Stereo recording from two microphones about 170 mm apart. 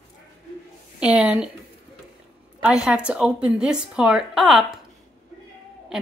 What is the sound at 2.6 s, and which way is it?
A woman's voice, 5° right (ahead or behind).